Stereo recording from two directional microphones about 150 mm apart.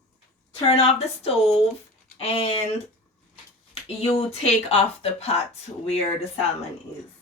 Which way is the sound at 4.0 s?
45° left (ahead or behind).